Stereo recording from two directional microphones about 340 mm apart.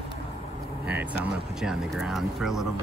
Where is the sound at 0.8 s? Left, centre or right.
Centre.